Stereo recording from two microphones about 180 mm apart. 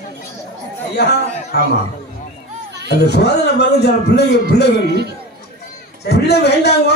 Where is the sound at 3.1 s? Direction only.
65° left (ahead or behind).